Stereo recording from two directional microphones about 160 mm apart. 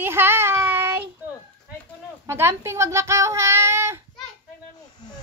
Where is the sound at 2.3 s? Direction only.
15° right (ahead or behind).